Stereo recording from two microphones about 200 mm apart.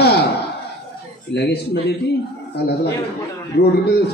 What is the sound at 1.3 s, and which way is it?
Speech, 55° left (ahead or behind).